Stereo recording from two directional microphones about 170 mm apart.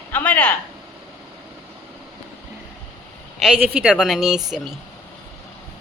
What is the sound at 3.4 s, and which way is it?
Speech, 5° right (ahead or behind).